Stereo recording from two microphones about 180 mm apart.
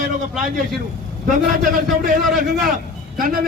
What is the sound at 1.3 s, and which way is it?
Speech, 50° right (ahead or behind).